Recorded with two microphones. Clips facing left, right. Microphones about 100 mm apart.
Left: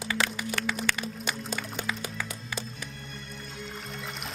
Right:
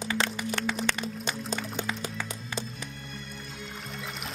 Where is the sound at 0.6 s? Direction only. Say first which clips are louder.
Even; 30° right (ahead or behind).